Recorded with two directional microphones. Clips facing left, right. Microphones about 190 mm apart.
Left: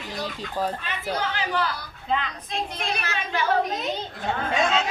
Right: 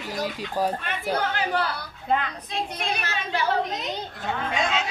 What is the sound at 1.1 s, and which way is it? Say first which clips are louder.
Speech: right 2 dB; 50° right (ahead or behind).